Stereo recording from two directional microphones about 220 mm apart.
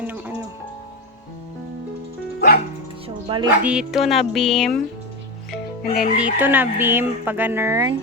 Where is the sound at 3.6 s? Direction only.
5° right (ahead or behind).